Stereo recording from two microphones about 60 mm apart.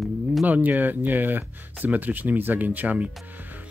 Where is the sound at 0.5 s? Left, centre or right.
Right.